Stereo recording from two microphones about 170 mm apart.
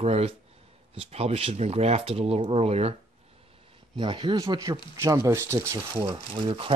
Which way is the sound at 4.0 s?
30° right (ahead or behind).